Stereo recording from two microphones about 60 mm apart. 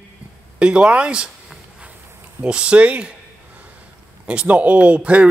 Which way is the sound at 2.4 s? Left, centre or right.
Centre.